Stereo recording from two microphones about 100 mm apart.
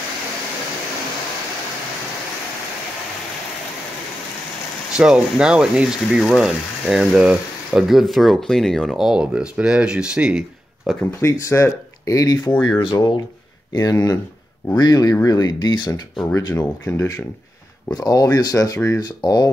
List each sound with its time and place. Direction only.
4.9 s speech: 5° right (ahead or behind)
11.1 s speech: 30° left (ahead or behind)
12.9 s speech: 50° left (ahead or behind)
13.7 s speech: 35° left (ahead or behind)
16.3 s speech: 35° left (ahead or behind)
16.9 s speech: 20° left (ahead or behind)
17.8 s speech: 40° left (ahead or behind)